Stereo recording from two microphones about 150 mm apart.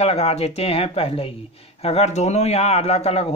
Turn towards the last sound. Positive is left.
turn(degrees=45)  # may be behind; listen again after turning